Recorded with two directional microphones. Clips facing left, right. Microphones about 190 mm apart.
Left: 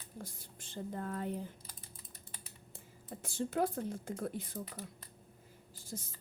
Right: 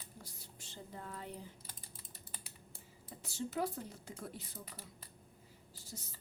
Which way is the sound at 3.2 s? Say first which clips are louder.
Left 4 dB; 50° left (ahead or behind).